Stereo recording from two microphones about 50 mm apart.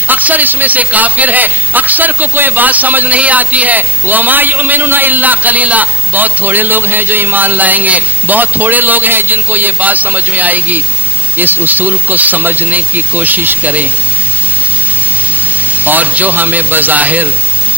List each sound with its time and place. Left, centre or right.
0.1 s a man's voice: right
15.8 s a man's voice: right